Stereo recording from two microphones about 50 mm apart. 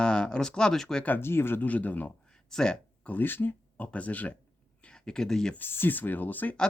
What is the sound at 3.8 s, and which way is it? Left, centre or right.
Speech, left.